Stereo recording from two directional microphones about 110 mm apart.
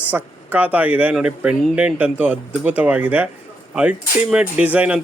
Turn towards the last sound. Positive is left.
turn(degrees=-15)  # may be behind; listen again after turning